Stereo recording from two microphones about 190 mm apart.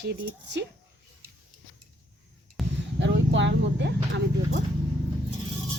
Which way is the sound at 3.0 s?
70° right (ahead or behind).